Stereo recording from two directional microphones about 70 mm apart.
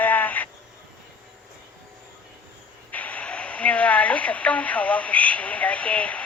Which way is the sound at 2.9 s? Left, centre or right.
Left.